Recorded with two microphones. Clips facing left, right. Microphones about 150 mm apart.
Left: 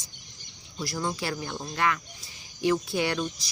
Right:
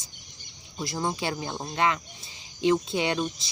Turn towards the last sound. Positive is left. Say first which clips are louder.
# right 1 dB
turn(degrees=-25)  # may be behind; listen again after turning